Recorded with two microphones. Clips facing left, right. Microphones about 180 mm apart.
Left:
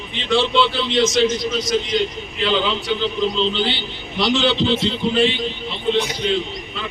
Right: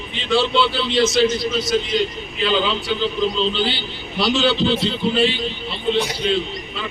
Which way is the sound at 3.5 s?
20° left (ahead or behind).